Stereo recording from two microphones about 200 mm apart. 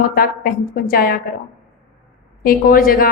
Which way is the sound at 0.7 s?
45° left (ahead or behind).